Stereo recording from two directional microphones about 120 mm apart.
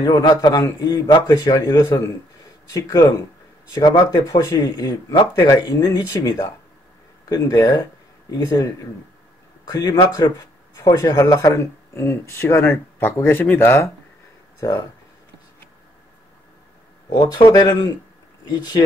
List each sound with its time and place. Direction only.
0.0 s speech: 35° left (ahead or behind)
17.5 s speech: 35° left (ahead or behind)